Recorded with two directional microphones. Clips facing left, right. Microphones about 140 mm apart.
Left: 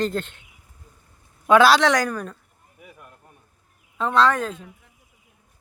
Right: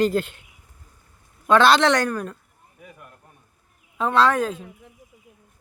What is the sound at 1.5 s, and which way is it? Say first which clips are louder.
Speech: left 1 dB; 5° left (ahead or behind).